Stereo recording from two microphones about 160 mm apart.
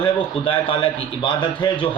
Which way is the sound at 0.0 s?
30° left (ahead or behind).